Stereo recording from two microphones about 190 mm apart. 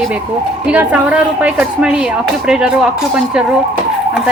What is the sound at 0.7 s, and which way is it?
A woman's voice, 5° right (ahead or behind).